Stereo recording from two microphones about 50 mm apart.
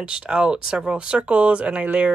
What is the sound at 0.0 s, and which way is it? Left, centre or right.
Speech, centre.